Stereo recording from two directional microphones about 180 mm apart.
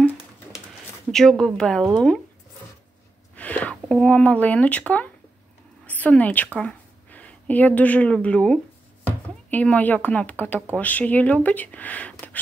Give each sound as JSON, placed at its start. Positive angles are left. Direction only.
{"t": 1.1, "sound": "a woman's voice", "side_deg": 0}
{"t": 3.3, "sound": "a woman's voice", "side_deg": 10}